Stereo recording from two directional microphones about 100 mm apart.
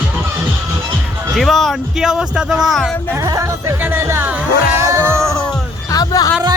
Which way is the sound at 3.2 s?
35° right (ahead or behind).